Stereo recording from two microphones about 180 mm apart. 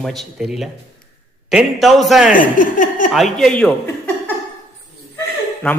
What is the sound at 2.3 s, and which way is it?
Speech, 50° left (ahead or behind).